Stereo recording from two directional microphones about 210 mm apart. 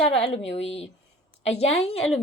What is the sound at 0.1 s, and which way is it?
Speech, 25° left (ahead or behind).